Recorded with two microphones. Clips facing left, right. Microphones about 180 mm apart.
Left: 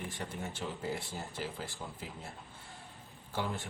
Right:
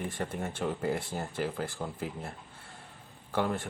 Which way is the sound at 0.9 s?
Centre (ahead or behind).